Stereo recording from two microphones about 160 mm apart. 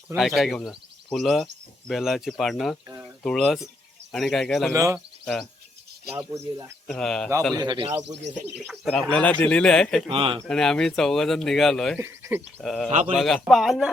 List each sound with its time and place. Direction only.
0.2 s speech: centre (ahead or behind)
2.8 s a sound: 20° right (ahead or behind)
3.2 s speech: centre (ahead or behind)
4.7 s speech: 20° right (ahead or behind)
4.9 s speech: 5° left (ahead or behind)
6.1 s speech: 20° right (ahead or behind)
6.8 s speech: 5° left (ahead or behind)
7.5 s speech: 25° right (ahead or behind)
8.0 s speech: 90° right
8.6 s speech: centre (ahead or behind)
10.1 s speech: 35° right (ahead or behind)
10.4 s speech: 5° left (ahead or behind)
11.9 s speech: 15° right (ahead or behind)
12.6 s speech: centre (ahead or behind)